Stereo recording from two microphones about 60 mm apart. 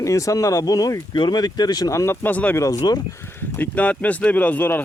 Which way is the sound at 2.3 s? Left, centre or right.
Left.